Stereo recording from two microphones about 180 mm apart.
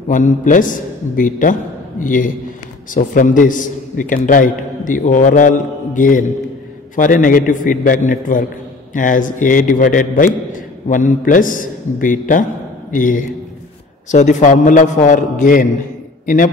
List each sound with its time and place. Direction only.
0.1 s a man's voice: 45° left (ahead or behind)